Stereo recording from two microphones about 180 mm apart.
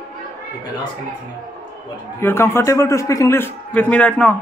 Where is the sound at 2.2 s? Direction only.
15° left (ahead or behind).